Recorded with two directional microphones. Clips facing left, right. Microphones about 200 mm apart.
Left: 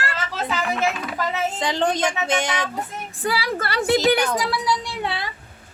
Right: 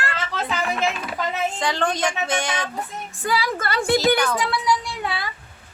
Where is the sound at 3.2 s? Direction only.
35° left (ahead or behind).